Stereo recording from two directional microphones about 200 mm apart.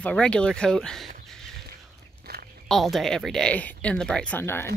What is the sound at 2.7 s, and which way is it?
Speech, centre (ahead or behind).